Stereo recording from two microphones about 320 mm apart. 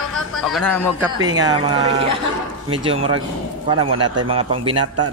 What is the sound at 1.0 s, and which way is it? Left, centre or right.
Speech, centre.